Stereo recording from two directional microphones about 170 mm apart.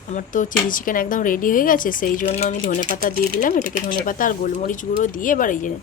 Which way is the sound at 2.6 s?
55° left (ahead or behind).